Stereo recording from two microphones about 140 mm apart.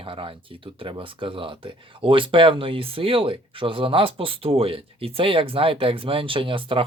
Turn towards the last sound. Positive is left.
turn(degrees=-40)  # may be behind; listen again after turning